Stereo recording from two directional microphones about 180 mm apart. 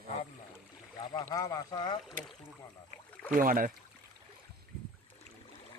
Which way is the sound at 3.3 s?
50° right (ahead or behind).